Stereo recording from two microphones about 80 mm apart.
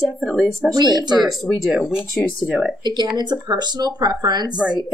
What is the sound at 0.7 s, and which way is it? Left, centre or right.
Speech, right.